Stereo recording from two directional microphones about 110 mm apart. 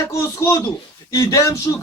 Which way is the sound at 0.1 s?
25° left (ahead or behind).